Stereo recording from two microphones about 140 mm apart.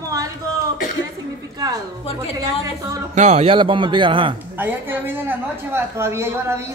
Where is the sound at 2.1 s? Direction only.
45° left (ahead or behind).